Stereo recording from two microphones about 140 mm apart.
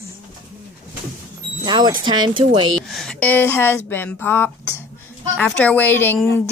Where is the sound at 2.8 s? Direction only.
Centre (ahead or behind).